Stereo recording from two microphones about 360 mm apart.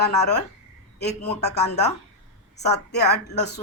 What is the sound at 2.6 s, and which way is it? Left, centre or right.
Speech, left.